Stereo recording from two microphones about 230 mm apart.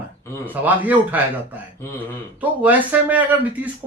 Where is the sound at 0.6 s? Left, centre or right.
Centre.